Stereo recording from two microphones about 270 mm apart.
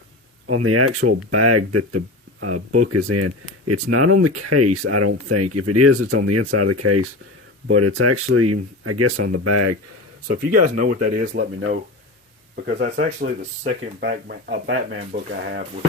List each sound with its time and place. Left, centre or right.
0.4 s speech: right
10.8 s speech: right